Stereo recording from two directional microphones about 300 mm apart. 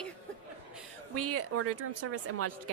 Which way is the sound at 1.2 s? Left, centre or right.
Right.